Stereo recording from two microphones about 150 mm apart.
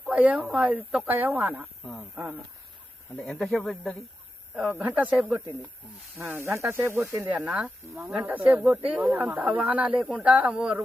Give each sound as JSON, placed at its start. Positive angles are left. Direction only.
{"t": 0.0, "sound": "speech", "side_deg": -10}
{"t": 1.8, "sound": "speech", "side_deg": 0}
{"t": 2.1, "sound": "speech", "side_deg": -10}
{"t": 3.1, "sound": "speech", "side_deg": 5}
{"t": 4.5, "sound": "speech", "side_deg": -10}
{"t": 6.4, "sound": "speech", "side_deg": -20}